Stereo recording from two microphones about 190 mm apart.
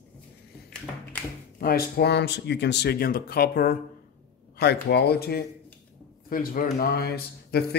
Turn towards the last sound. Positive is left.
turn(degrees=55)  # may be behind; listen again after turning